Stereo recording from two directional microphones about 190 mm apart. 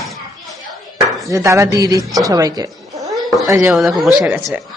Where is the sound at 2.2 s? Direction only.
20° right (ahead or behind).